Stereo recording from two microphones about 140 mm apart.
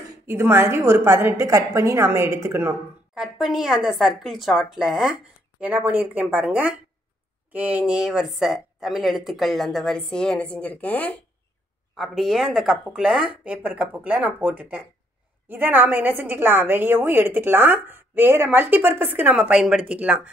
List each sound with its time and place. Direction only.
0.3 s a woman's voice: 15° right (ahead or behind)
3.2 s speech: 5° right (ahead or behind)
12.0 s a woman's voice: centre (ahead or behind)